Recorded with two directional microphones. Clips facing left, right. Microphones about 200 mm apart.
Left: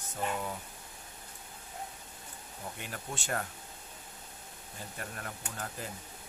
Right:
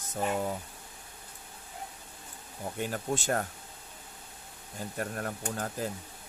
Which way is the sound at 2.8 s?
40° right (ahead or behind).